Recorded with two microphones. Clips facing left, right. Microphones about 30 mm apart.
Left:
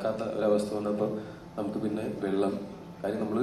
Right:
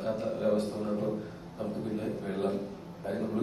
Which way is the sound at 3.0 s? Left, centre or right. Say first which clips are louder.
Left 3 dB; left.